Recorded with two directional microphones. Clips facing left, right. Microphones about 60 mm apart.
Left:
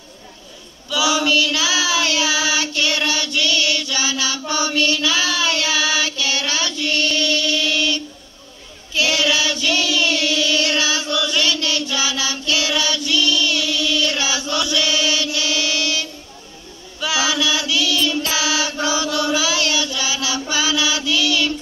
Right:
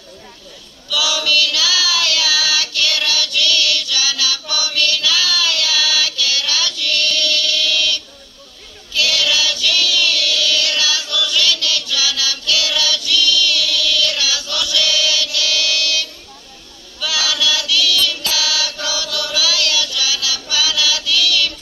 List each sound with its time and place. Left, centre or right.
0.8 s child singing: left
8.9 s chant: left